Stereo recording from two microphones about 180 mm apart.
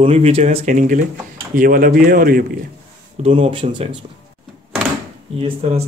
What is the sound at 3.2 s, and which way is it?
Speech, 30° right (ahead or behind).